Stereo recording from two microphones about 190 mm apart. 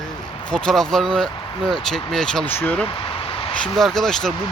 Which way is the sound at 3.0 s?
30° left (ahead or behind).